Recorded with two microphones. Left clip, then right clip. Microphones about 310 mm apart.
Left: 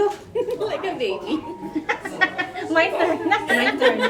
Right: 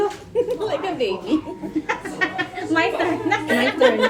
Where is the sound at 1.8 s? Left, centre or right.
Centre.